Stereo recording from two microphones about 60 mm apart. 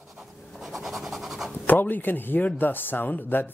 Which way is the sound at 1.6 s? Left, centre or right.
Left.